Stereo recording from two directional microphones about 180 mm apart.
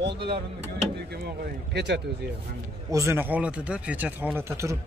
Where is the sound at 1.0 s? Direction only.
65° right (ahead or behind).